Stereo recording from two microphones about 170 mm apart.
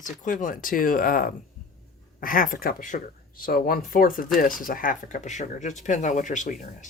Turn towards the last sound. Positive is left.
turn(degrees=45)  # may be behind; listen again after turning